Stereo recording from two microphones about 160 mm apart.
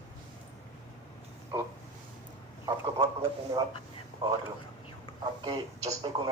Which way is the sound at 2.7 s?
35° right (ahead or behind).